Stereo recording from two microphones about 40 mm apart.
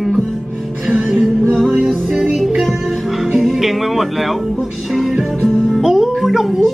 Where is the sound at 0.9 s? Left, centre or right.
Right.